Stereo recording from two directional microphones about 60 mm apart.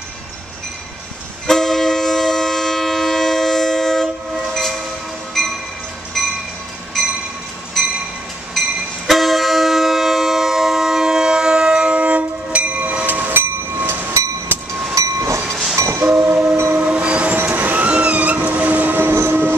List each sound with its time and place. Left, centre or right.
1.5 s train: centre
6.2 s train: centre
7.8 s train: centre
8.5 s vehicle: centre; by 14.1 s right
14.5 s train: right
15.0 s train: right
15.4 s train: centre
15.7 s train: right
16.0 s train: centre; by 19.1 s right
19.1 s vehicle: right